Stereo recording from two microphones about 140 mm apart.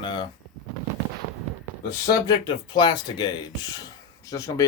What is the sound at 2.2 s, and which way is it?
Speech, 30° left (ahead or behind).